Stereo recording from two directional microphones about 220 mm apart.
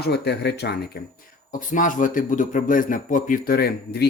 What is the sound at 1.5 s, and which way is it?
A man's voice, 35° left (ahead or behind).